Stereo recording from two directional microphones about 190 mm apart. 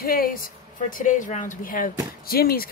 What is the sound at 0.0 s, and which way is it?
A woman's voice, 50° left (ahead or behind).